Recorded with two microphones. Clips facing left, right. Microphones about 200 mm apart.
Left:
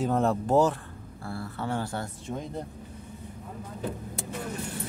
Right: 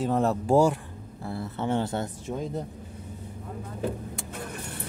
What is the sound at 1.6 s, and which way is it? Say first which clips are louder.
Speech: right 5 dB; 20° right (ahead or behind).